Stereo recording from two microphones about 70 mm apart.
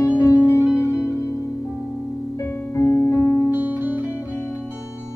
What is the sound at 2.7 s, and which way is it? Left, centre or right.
Music, left.